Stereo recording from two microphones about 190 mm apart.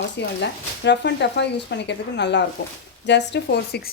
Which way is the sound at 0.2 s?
65° left (ahead or behind).